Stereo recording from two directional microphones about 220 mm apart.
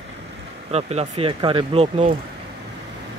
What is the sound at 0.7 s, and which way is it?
Speech, 30° right (ahead or behind).